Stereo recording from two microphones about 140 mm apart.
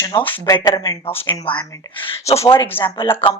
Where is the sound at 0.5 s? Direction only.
35° left (ahead or behind).